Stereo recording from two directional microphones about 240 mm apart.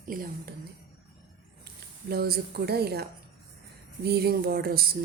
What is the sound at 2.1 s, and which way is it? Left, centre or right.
Speech, right.